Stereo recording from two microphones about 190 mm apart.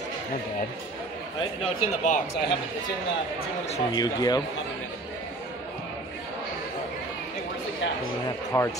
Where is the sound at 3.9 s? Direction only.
20° left (ahead or behind).